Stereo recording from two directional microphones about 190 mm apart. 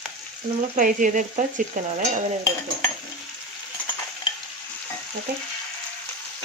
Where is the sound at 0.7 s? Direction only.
45° right (ahead or behind).